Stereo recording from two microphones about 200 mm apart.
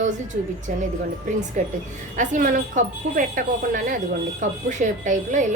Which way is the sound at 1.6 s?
40° right (ahead or behind).